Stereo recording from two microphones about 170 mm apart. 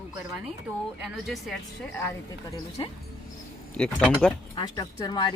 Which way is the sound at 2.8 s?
30° left (ahead or behind).